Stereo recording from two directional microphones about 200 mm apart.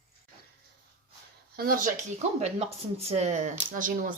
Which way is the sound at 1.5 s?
45° right (ahead or behind).